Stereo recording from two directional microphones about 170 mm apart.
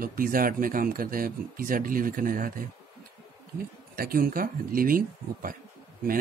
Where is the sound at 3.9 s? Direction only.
60° right (ahead or behind).